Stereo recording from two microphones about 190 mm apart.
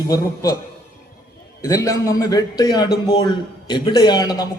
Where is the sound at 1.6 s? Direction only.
15° left (ahead or behind).